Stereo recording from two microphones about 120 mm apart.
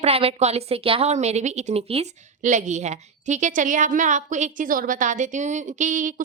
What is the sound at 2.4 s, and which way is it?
A woman's voice, 90° right.